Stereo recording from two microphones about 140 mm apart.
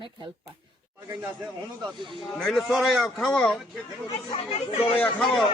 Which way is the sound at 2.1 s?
Centre (ahead or behind).